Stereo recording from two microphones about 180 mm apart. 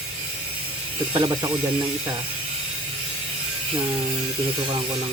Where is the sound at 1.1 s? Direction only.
25° right (ahead or behind).